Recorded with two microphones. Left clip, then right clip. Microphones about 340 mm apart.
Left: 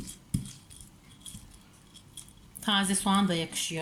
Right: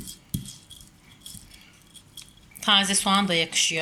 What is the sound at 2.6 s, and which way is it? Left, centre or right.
Speech, centre.